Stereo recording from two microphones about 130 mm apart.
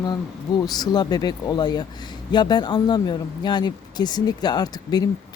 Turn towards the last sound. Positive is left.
turn(degrees=30)  # may be behind; listen again after turning